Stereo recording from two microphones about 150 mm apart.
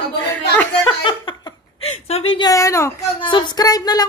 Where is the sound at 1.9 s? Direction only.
40° left (ahead or behind).